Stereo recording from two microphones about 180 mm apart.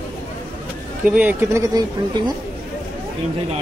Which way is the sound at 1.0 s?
10° right (ahead or behind).